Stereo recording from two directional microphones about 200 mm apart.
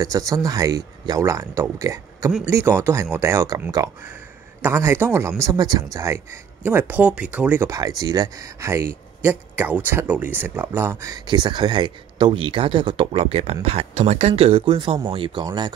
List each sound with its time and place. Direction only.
0.0 s speech: 15° right (ahead or behind)